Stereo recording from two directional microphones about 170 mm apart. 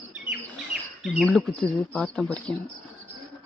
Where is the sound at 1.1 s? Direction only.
Centre (ahead or behind).